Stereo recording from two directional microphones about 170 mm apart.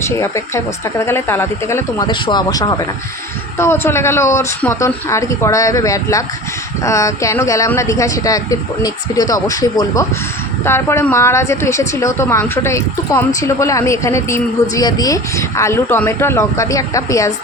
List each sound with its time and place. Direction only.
0.2 s a woman's voice: 15° left (ahead or behind)